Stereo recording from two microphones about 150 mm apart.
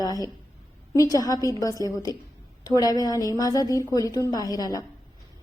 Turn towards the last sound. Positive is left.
turn(degrees=25)  # may be behind; listen again after turning